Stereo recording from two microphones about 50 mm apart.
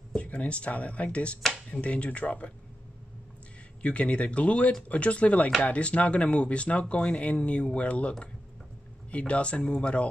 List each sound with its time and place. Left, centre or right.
0.1 s speech: left
3.8 s speech: left
9.1 s speech: left